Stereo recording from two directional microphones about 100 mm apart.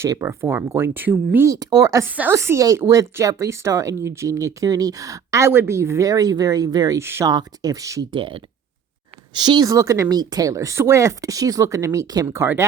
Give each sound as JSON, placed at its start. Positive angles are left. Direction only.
{"t": 0.0, "sound": "speech", "side_deg": -25}
{"t": 1.5, "sound": "speech", "side_deg": -35}
{"t": 2.0, "sound": "a woman's voice", "side_deg": -20}
{"t": 2.3, "sound": "speech", "side_deg": -30}
{"t": 7.0, "sound": "speech", "side_deg": -25}
{"t": 7.3, "sound": "speech", "side_deg": -40}
{"t": 8.1, "sound": "speech", "side_deg": -60}
{"t": 9.3, "sound": "speech", "side_deg": -50}